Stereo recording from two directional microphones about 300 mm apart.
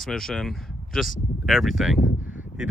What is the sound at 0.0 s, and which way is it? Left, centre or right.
Speech, centre.